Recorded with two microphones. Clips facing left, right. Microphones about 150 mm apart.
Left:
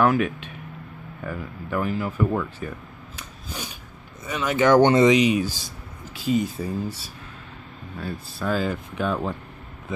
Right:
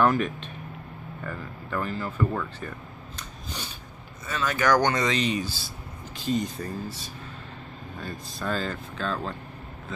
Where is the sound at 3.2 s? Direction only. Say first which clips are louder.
Left 3 dB; 10° left (ahead or behind).